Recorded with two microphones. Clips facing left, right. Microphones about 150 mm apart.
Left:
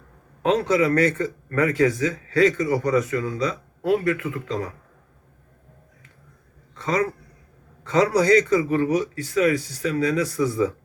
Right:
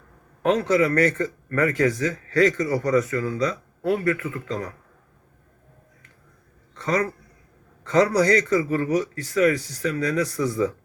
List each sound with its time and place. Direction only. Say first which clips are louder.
0.4 s a man's voice: even; 25° left (ahead or behind)
6.8 s a man's voice: left 1 dB; 25° left (ahead or behind)